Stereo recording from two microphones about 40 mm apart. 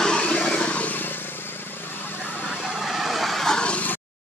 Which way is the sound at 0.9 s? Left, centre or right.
Left.